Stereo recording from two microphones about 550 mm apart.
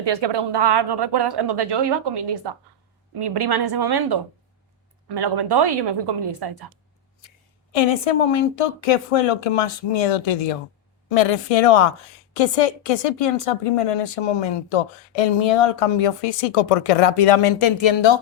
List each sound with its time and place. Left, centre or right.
0.0 s speech: right
7.2 s a woman's voice: left